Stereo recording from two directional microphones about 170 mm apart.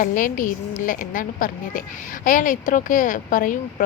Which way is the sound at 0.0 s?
50° left (ahead or behind).